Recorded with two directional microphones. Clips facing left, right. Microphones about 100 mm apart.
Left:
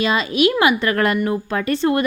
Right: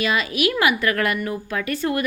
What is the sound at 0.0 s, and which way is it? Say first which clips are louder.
A woman's voice: left 4 dB; 30° left (ahead or behind).